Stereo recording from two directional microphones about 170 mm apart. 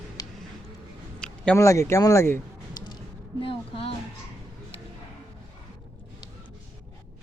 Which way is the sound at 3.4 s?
30° left (ahead or behind).